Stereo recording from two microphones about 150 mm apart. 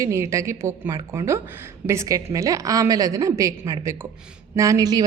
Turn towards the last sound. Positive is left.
turn(degrees=-25)  # may be behind; listen again after turning